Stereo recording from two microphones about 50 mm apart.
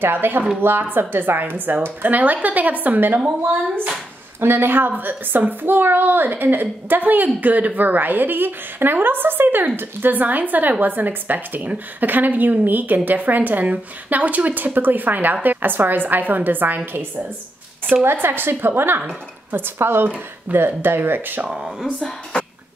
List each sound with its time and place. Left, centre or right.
0.0 s a woman's voice: right
4.4 s a child's voice: right
18.0 s a woman's voice: right
21.5 s speech: centre
22.3 s cough: centre